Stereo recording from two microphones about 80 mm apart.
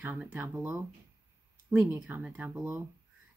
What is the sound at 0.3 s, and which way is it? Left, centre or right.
Speech, right.